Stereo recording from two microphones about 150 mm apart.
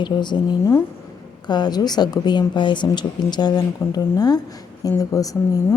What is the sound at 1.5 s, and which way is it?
A woman's voice, 30° left (ahead or behind).